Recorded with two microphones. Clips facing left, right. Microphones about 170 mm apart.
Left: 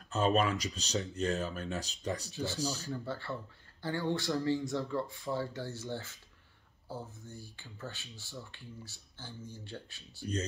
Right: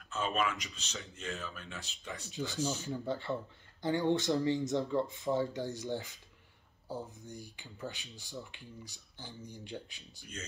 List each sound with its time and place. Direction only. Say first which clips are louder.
0.1 s speech: left 5 dB; 40° left (ahead or behind)
2.9 s speech: right 3 dB; 15° right (ahead or behind)